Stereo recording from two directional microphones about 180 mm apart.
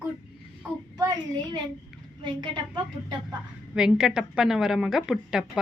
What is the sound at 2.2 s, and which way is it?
Speech, 25° right (ahead or behind).